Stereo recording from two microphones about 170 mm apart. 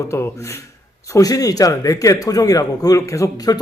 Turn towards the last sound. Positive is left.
turn(degrees=25)  # may be behind; listen again after turning